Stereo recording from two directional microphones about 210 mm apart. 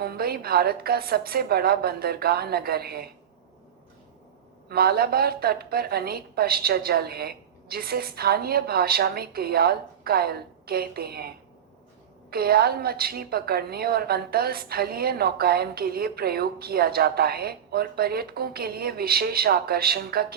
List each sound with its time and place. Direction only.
0.0 s a woman's voice: 45° right (ahead or behind)
4.7 s a woman's voice: 45° right (ahead or behind)